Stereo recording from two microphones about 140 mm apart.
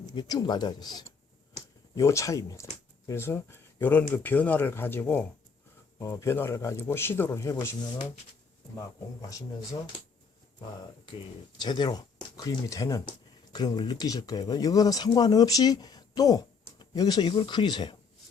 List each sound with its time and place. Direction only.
0.0 s speech: 30° left (ahead or behind)
11.0 s speech: 35° left (ahead or behind)